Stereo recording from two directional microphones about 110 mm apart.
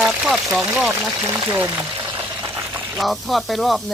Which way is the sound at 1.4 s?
20° right (ahead or behind).